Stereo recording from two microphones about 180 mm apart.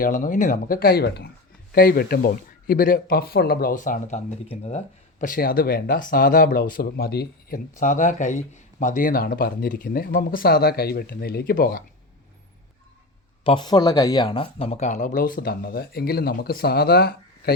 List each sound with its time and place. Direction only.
0.0 s speech: 50° left (ahead or behind)
5.2 s speech: 50° left (ahead or behind)
7.8 s speech: 45° left (ahead or behind)
13.4 s speech: 30° left (ahead or behind); by 17.5 s 60° left (ahead or behind)